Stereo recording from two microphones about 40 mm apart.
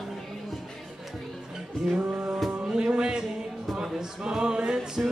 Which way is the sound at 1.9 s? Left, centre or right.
Right.